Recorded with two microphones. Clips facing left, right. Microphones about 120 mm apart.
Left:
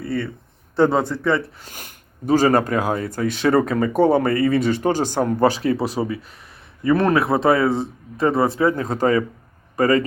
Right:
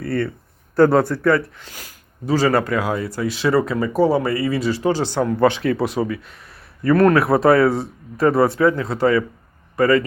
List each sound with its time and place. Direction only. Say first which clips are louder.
0.9 s speech: right 3 dB; 20° left (ahead or behind)
1.5 s speech: even; 45° left (ahead or behind)
3.9 s speech: left 1 dB; 55° left (ahead or behind); by 8.7 s 30° left (ahead or behind)
8.7 s speech: right 1 dB; 40° left (ahead or behind)